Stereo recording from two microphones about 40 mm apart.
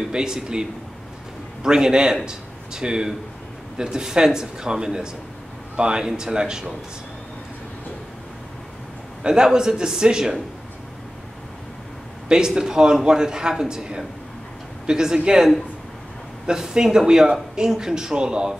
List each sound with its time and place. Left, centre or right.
0.1 s speech: centre
9.2 s speech: centre
12.3 s speech: centre
16.4 s speech: centre